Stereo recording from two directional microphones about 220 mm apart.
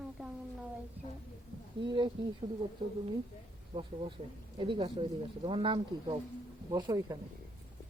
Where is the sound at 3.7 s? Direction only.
25° right (ahead or behind).